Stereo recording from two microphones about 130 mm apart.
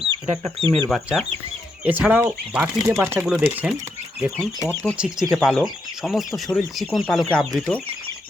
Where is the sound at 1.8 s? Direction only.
10° right (ahead or behind).